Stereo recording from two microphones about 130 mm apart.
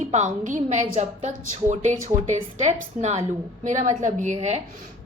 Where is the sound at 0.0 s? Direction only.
60° right (ahead or behind).